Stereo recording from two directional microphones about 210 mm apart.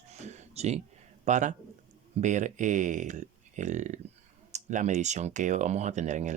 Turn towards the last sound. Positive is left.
turn(degrees=-35)  # may be behind; listen again after turning